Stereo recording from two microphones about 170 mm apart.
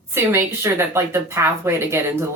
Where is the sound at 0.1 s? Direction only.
15° right (ahead or behind).